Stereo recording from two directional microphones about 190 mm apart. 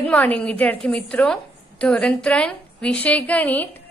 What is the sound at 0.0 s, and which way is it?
A woman's voice, 5° left (ahead or behind).